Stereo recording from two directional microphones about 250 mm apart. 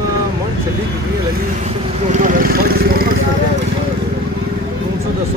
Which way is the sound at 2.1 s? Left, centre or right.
Right.